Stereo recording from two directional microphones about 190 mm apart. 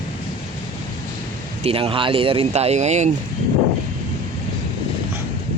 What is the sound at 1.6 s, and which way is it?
Speech, 30° right (ahead or behind).